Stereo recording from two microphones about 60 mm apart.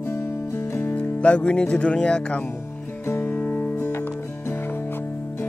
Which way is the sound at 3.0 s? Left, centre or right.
Left.